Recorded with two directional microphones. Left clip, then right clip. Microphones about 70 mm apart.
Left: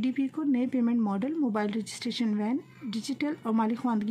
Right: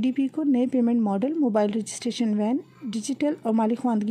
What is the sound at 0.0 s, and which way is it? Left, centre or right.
Speech, right.